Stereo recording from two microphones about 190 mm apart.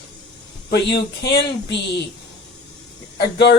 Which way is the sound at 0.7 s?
60° left (ahead or behind).